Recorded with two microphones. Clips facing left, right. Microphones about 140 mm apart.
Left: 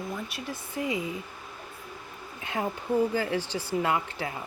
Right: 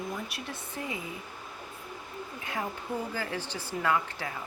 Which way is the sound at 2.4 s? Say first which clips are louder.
Left 5 dB; 25° left (ahead or behind).